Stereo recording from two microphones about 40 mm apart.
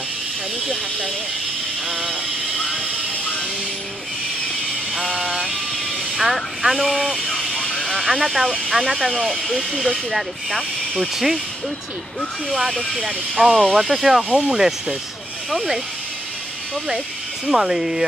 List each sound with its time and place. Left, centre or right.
1.9 s vehicle: centre
4.9 s a sound: centre
6.1 s vehicle: centre
8.6 s speech: centre
12.4 s speech: centre
17.5 s speech: centre